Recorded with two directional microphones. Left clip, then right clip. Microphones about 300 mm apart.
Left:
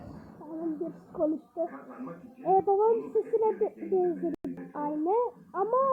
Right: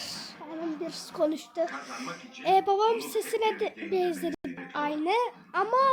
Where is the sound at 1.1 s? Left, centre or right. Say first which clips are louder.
Right 2 dB; right.